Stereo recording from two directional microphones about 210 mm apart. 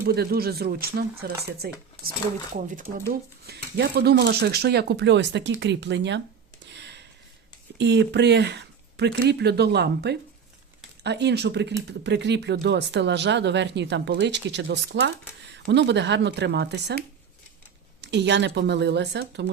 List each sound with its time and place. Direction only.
0.0 s speech: 45° right (ahead or behind)
3.1 s speech: 50° right (ahead or behind)
6.7 s a sound: 55° right (ahead or behind)
7.8 s speech: 55° right (ahead or behind)
18.0 s speech: 55° right (ahead or behind)